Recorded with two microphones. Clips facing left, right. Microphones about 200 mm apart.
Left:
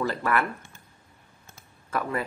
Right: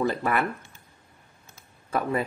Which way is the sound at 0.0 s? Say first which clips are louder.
Right 1 dB; 20° right (ahead or behind).